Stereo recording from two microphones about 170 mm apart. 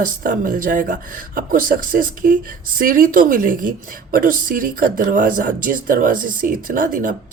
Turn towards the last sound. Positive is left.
turn(degrees=-55)  # may be behind; listen again after turning